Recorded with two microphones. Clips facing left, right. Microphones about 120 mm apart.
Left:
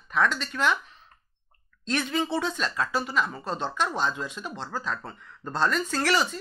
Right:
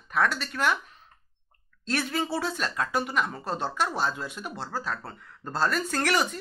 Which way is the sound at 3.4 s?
10° right (ahead or behind).